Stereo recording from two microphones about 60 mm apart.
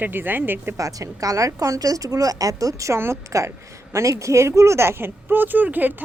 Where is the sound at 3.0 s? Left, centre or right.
Right.